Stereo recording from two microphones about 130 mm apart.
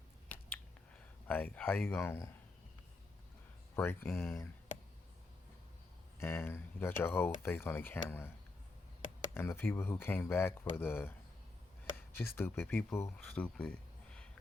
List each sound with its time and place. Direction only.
0.3 s a sound: 15° left (ahead or behind)
1.3 s speech: 15° left (ahead or behind)
3.8 s speech: 20° left (ahead or behind)
6.1 s speech: 20° left (ahead or behind)
9.3 s speech: 20° left (ahead or behind)
13.1 s speech: 5° left (ahead or behind)